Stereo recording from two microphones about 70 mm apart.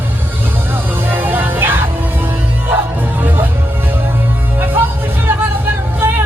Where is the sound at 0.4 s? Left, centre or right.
Right.